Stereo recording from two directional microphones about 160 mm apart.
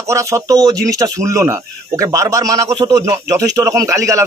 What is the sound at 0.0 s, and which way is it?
A man's voice, 20° right (ahead or behind).